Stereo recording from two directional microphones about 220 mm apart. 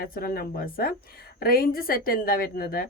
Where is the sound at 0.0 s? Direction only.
45° left (ahead or behind).